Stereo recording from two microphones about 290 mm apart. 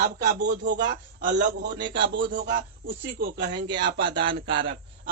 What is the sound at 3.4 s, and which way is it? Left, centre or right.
Speech, centre.